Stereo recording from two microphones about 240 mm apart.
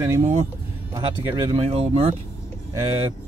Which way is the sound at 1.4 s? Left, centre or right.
Right.